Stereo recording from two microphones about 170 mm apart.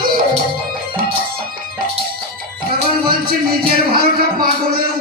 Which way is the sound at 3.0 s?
60° right (ahead or behind).